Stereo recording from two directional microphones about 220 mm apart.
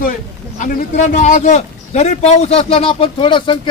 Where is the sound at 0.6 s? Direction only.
35° left (ahead or behind).